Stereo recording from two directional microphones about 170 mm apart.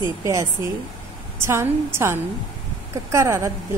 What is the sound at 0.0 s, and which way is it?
A woman's voice, 20° right (ahead or behind).